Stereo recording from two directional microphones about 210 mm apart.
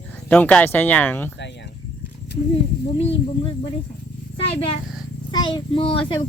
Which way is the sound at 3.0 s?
25° left (ahead or behind).